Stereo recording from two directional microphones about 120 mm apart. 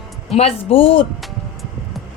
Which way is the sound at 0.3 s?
60° left (ahead or behind).